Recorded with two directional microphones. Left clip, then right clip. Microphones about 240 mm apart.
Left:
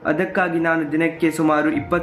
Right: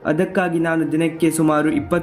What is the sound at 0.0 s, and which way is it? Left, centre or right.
Speech, right.